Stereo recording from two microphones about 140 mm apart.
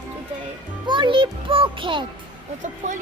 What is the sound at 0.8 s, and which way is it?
A child's voice, 35° right (ahead or behind).